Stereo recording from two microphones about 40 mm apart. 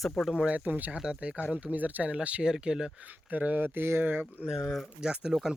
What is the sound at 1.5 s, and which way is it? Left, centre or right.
Speech, right.